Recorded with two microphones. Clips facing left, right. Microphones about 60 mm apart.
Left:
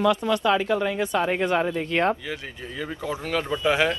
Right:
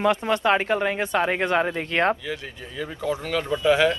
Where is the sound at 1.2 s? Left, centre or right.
Right.